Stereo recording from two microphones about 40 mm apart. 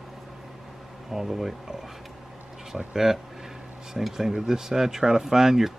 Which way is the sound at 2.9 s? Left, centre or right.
Centre.